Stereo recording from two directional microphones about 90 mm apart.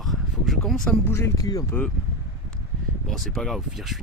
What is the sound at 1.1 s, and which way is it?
Speech, 30° left (ahead or behind).